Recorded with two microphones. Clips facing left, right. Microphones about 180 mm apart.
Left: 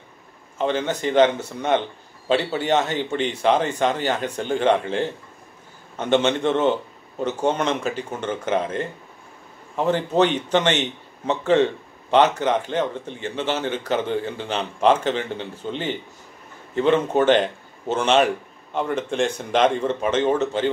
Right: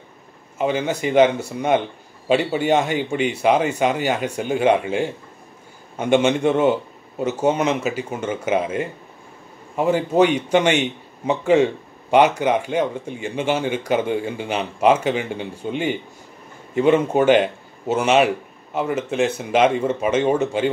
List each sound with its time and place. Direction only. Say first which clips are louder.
0.6 s a man's voice: right 2 dB; 10° right (ahead or behind)